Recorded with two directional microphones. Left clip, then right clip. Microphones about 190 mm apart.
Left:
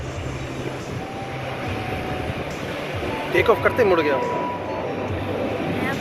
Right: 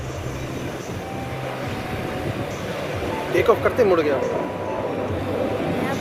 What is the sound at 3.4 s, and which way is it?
Speech, 15° right (ahead or behind).